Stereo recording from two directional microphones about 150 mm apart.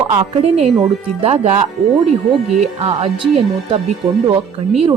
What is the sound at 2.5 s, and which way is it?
Speech, 45° right (ahead or behind).